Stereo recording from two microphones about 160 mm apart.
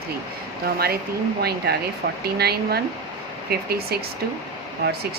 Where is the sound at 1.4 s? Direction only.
85° right.